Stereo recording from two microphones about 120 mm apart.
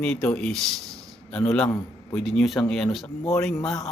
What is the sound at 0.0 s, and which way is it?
Speech, 5° left (ahead or behind).